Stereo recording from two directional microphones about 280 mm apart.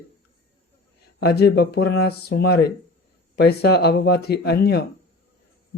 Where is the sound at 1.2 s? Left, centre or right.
Left.